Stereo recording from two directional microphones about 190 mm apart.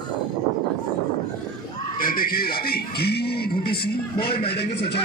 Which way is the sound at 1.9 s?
50° left (ahead or behind).